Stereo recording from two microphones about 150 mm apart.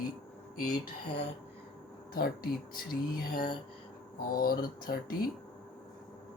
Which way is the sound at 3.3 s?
30° left (ahead or behind).